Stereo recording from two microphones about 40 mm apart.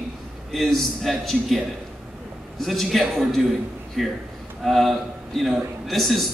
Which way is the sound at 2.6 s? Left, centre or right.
Centre.